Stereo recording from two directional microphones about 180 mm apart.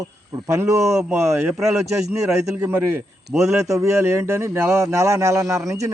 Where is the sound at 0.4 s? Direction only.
15° right (ahead or behind).